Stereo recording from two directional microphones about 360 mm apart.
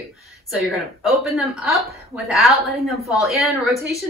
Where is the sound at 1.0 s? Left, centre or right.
Centre.